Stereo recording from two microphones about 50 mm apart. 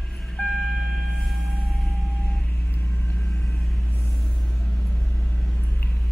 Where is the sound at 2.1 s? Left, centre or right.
Centre.